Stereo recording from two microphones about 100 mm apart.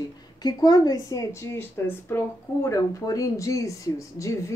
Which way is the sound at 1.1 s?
30° left (ahead or behind).